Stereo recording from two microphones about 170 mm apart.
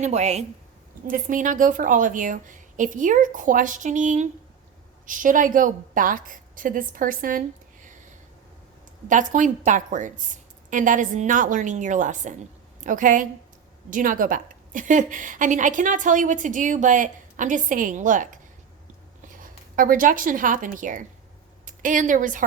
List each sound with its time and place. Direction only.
0.0 s a woman's voice: 40° right (ahead or behind)
1.0 s a woman's voice: 50° right (ahead or behind)
9.0 s a woman's voice: 50° right (ahead or behind)
19.4 s a woman's voice: 55° right (ahead or behind)